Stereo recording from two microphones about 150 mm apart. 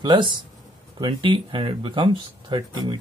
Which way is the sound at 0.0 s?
30° right (ahead or behind).